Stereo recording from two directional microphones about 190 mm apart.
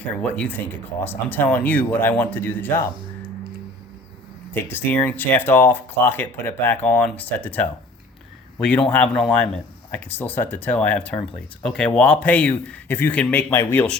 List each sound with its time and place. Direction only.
0.0 s speech: 5° left (ahead or behind)
4.5 s speech: 10° left (ahead or behind)